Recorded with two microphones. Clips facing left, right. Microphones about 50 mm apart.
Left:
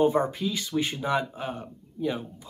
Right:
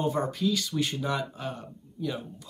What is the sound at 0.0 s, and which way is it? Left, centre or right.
Speech, left.